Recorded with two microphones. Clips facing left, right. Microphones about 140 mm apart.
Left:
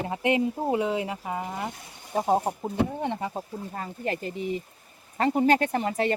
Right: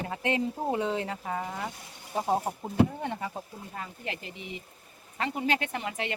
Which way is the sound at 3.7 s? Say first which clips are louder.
Left 7 dB; 40° left (ahead or behind).